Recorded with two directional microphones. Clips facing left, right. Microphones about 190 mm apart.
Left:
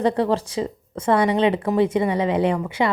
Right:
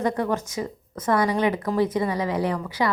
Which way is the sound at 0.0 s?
30° left (ahead or behind).